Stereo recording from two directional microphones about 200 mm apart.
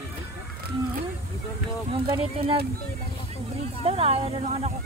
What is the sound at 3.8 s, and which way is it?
Speech, 30° right (ahead or behind).